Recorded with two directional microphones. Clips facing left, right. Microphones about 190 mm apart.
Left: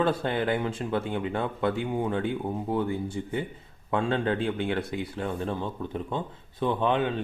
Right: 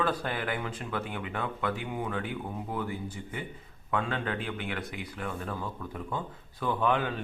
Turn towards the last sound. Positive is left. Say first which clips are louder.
# left 3 dB
turn(degrees=25)  # may be behind; listen again after turning